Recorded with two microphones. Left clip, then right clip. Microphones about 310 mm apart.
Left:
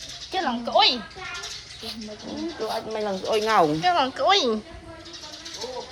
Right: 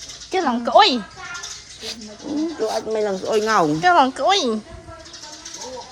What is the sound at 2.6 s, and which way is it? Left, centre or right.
Speech, right.